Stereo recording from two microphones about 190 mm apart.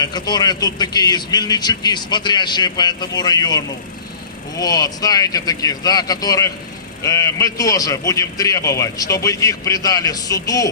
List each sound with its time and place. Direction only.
0.0 s a man's voice: 20° left (ahead or behind)